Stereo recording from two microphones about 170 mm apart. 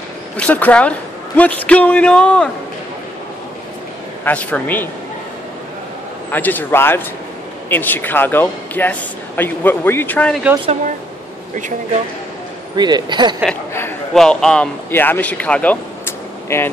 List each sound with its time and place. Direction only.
0.4 s a man's voice: 10° left (ahead or behind)
4.2 s a man's voice: 10° left (ahead or behind)
6.3 s a man's voice: 10° left (ahead or behind)
12.7 s a man's voice: 25° right (ahead or behind)
13.5 s a man's voice: 15° left (ahead or behind)